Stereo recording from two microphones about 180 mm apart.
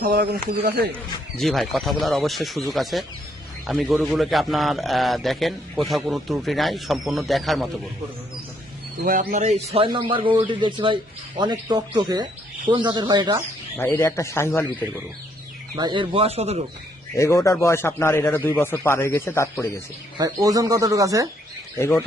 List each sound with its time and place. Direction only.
0.0 s speech: 55° right (ahead or behind)
1.4 s a man's voice: centre (ahead or behind)
9.0 s speech: 45° right (ahead or behind); by 13.4 s 25° right (ahead or behind)
13.7 s speech: 10° left (ahead or behind)
15.7 s speech: 25° right (ahead or behind)
17.2 s speech: 15° left (ahead or behind)
20.1 s speech: 20° right (ahead or behind)
21.8 s speech: 15° left (ahead or behind)